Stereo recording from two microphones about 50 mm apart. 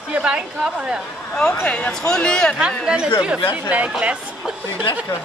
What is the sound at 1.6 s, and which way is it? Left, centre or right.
Speech, left.